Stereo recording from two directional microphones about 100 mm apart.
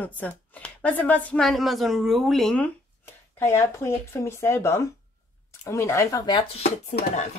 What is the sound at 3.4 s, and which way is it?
Speech, 25° left (ahead or behind).